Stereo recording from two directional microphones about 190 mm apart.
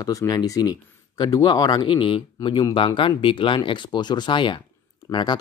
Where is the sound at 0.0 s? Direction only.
20° left (ahead or behind).